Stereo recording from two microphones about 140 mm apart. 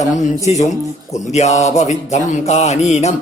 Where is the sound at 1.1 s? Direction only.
55° left (ahead or behind).